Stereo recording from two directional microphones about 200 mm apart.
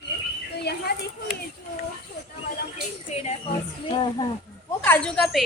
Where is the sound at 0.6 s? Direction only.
55° left (ahead or behind).